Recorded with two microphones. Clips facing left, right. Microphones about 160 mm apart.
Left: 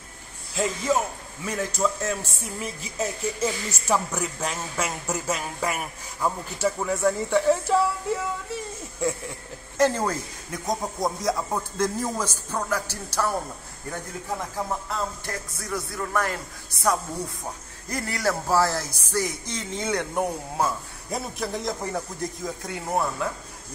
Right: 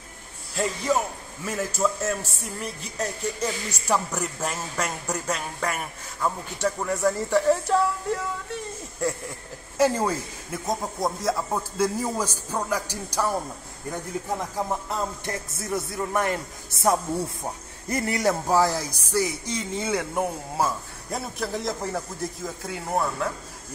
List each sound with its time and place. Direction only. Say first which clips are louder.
0.6 s a man's voice: even; centre (ahead or behind)
14.9 s music: right 1 dB; 20° right (ahead or behind)
17.8 s a man's voice: right 3 dB; 20° right (ahead or behind); by 23.3 s centre (ahead or behind)